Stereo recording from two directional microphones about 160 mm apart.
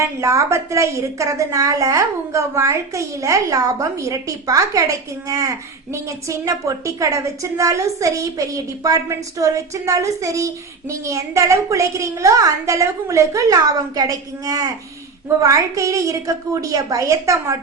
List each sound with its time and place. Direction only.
0.0 s a woman's voice: 20° right (ahead or behind)